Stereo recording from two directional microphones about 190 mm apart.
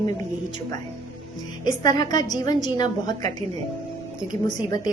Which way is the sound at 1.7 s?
20° left (ahead or behind).